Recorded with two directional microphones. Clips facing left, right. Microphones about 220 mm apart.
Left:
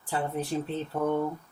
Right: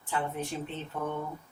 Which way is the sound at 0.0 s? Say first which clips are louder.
Left 3 dB; 35° left (ahead or behind).